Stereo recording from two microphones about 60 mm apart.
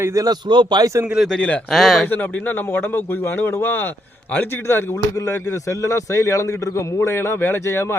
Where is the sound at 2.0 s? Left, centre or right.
Left.